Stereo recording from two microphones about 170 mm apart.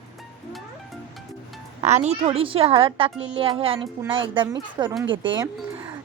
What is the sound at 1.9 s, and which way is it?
A woman's voice, 40° right (ahead or behind).